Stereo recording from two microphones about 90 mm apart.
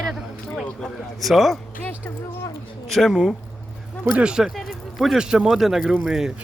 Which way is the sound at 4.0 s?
15° right (ahead or behind).